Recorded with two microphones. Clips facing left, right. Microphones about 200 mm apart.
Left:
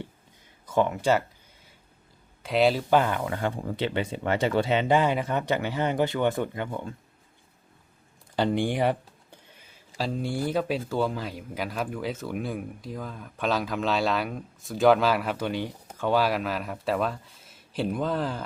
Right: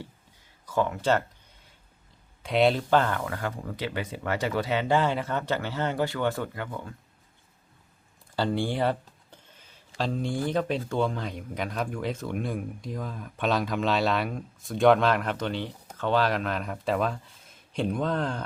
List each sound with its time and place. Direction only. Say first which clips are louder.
0.6 s speech: left 2 dB; 20° left (ahead or behind)
2.4 s speech: even; centre (ahead or behind)
2.9 s speech: left 1 dB; 15° left (ahead or behind)
3.2 s speech: left 4 dB; 25° left (ahead or behind)
8.4 s speech: left 2 dB; 15° left (ahead or behind)